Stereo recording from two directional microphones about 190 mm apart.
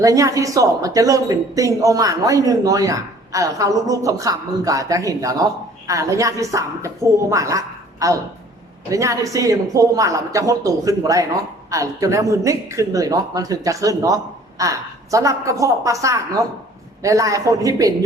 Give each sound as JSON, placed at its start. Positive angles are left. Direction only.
{"t": 0.0, "sound": "a man's voice", "side_deg": -15}